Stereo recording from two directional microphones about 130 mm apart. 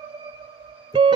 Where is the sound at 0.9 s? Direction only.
35° right (ahead or behind).